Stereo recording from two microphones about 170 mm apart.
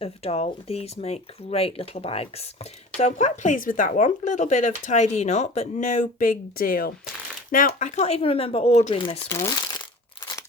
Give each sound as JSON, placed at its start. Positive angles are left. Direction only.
{"t": 0.0, "sound": "speech", "side_deg": 35}